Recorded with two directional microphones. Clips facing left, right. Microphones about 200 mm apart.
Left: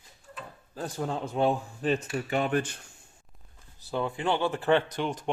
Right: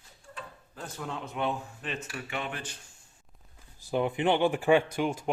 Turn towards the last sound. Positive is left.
turn(degrees=-10)  # may be behind; listen again after turning